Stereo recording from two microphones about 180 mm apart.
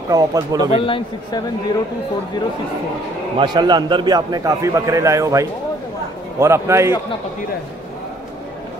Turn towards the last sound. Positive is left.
turn(degrees=-15)  # may be behind; listen again after turning